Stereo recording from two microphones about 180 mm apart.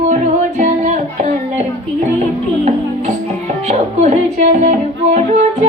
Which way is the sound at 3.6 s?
35° right (ahead or behind).